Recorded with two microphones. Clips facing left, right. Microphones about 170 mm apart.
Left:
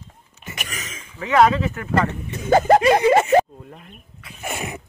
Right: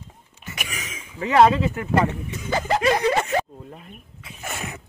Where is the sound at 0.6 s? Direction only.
10° right (ahead or behind).